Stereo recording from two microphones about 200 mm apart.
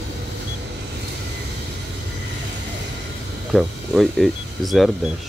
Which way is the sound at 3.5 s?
Centre (ahead or behind).